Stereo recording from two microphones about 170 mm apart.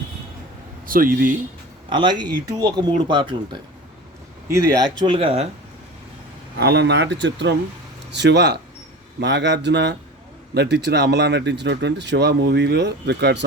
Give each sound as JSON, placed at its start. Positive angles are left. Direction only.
{"t": 0.9, "sound": "speech", "side_deg": -55}
{"t": 1.9, "sound": "speech", "side_deg": -25}
{"t": 4.4, "sound": "speech", "side_deg": -15}
{"t": 6.6, "sound": "speech", "side_deg": -75}